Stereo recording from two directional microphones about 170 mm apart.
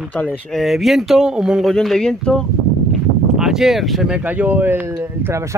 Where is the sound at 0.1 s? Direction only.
10° left (ahead or behind).